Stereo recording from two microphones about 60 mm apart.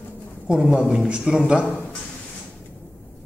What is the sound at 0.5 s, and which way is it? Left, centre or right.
Speech, centre.